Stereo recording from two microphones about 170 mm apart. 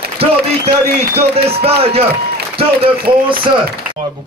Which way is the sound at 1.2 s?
35° right (ahead or behind).